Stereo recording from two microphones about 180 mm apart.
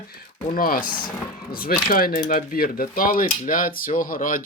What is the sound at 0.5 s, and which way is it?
Speech, 55° left (ahead or behind).